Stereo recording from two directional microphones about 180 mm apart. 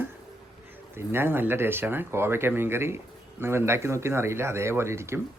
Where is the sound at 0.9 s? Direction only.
10° right (ahead or behind).